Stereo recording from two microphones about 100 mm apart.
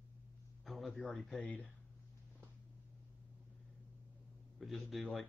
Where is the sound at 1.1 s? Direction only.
Centre (ahead or behind).